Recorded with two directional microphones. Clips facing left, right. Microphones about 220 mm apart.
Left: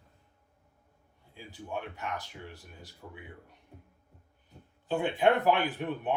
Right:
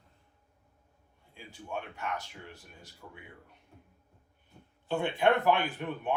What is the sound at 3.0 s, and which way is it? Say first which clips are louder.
Speech: left 3 dB; 20° left (ahead or behind).